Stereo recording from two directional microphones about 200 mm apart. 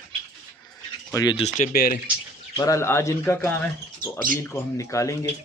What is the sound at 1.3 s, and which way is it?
Speech, 35° left (ahead or behind).